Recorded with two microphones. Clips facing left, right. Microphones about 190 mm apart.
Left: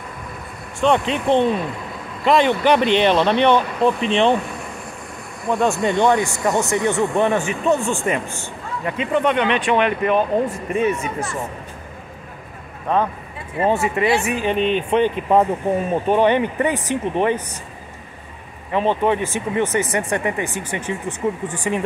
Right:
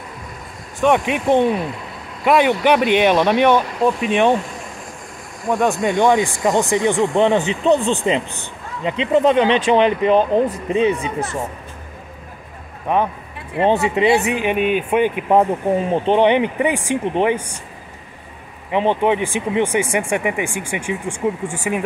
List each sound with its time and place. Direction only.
0.7 s speech: 15° right (ahead or behind)
5.5 s speech: 15° right (ahead or behind); by 10.6 s 35° right (ahead or behind)
10.7 s speech: 20° right (ahead or behind)
12.9 s speech: 15° right (ahead or behind)
13.6 s speech: 25° right (ahead or behind)
18.7 s speech: 15° right (ahead or behind)